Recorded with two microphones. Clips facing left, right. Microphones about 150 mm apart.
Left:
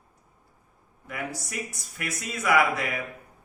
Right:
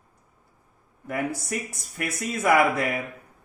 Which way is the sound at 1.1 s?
50° right (ahead or behind).